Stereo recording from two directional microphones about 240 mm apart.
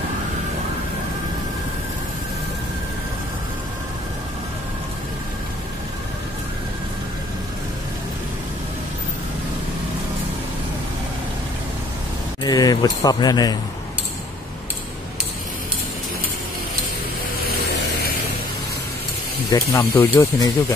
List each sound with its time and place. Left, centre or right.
12.4 s speech: centre
19.5 s speech: centre